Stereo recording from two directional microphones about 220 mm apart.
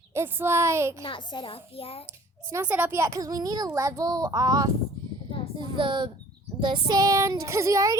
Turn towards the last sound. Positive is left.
turn(degrees=-15)  # may be behind; listen again after turning